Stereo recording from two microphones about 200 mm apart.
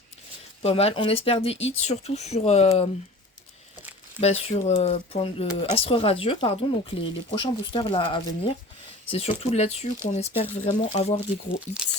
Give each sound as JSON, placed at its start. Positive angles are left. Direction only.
{"t": 0.6, "sound": "speech", "side_deg": 30}
{"t": 4.2, "sound": "speech", "side_deg": 35}